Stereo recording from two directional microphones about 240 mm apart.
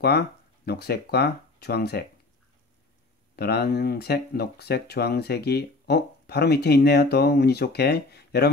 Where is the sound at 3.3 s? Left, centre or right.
Left.